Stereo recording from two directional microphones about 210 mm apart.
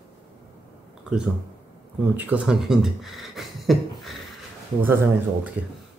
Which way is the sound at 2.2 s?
5° right (ahead or behind).